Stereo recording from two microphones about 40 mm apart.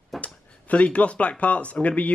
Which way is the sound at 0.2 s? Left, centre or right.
Left.